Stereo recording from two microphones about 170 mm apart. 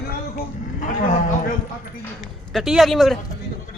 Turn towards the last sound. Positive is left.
turn(degrees=0)  # may be behind; listen again after turning